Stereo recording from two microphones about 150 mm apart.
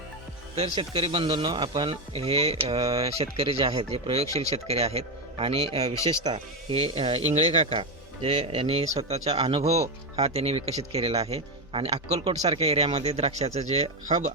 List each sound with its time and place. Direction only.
0.6 s a man's voice: 40° right (ahead or behind)